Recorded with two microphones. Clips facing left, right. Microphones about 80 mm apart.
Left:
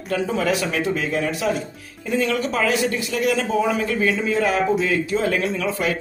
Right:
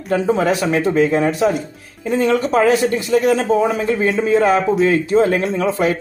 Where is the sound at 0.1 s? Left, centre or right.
Right.